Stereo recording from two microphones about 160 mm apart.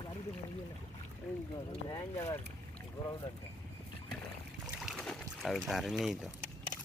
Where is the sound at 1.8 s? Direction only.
20° left (ahead or behind).